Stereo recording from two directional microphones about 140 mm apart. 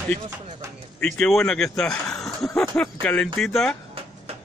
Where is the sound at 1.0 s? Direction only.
5° left (ahead or behind).